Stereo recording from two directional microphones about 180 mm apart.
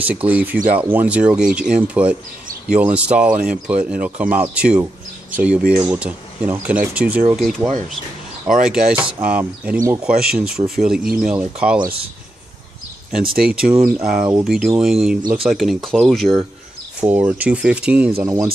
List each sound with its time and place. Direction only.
0.0 s speech: 10° right (ahead or behind)
13.3 s speech: 5° right (ahead or behind)